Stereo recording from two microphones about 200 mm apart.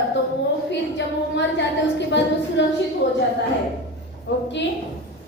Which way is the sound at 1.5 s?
60° left (ahead or behind).